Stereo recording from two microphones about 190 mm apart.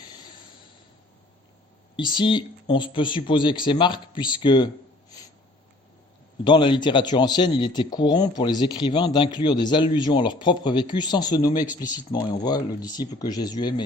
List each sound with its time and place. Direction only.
2.0 s speech: 25° left (ahead or behind)
6.4 s speech: 25° left (ahead or behind)